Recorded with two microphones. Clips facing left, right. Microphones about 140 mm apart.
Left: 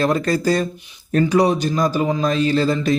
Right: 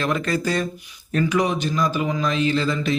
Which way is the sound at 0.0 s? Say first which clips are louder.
Left 5 dB; 35° left (ahead or behind).